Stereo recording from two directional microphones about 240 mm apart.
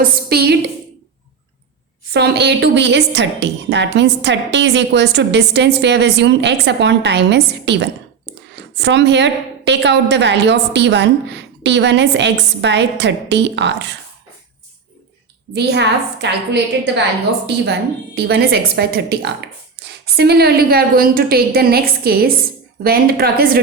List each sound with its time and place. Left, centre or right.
0.0 s a woman's voice: right
2.1 s a woman's voice: right
15.5 s a woman's voice: right